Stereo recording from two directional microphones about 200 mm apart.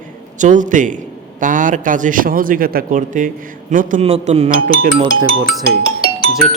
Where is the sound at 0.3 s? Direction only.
40° right (ahead or behind).